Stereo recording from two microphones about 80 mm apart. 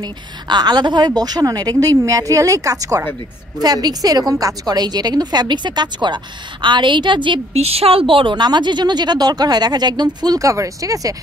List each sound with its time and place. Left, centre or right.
0.0 s a woman's voice: right